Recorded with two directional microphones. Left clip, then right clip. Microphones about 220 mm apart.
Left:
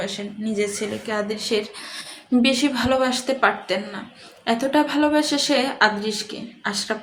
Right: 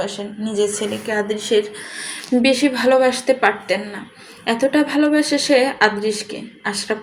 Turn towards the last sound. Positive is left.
turn(degrees=-5)  # may be behind; listen again after turning